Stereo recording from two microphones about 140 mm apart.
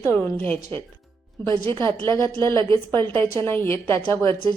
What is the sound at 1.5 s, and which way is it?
Speech, 35° right (ahead or behind).